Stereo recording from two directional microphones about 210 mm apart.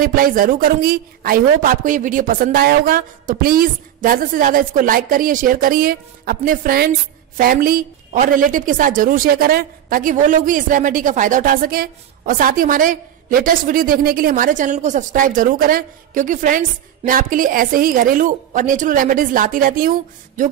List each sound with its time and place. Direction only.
0.0 s a woman's voice: 40° right (ahead or behind)